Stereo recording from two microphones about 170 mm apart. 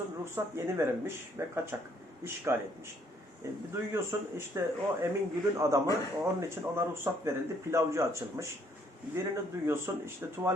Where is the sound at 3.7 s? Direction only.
15° right (ahead or behind).